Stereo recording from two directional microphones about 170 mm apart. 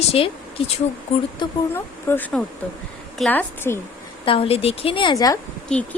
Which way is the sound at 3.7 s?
15° left (ahead or behind).